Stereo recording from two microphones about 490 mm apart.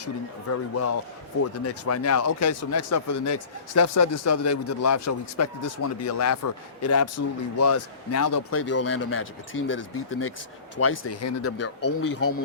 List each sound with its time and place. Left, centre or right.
0.7 s speech: left